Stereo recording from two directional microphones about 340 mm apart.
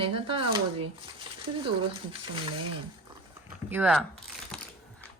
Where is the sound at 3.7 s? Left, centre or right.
Centre.